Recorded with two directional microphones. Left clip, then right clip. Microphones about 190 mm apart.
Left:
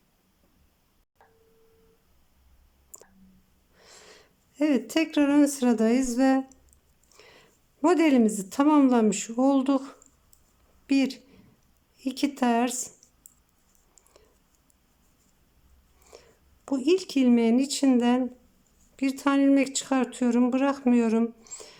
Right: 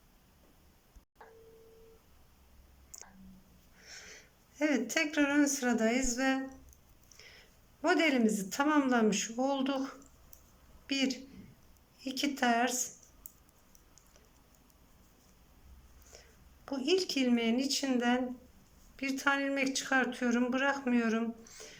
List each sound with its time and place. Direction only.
3.8 s a woman's voice: 25° left (ahead or behind)
16.1 s a sound: 20° left (ahead or behind)
16.6 s speech: 25° left (ahead or behind)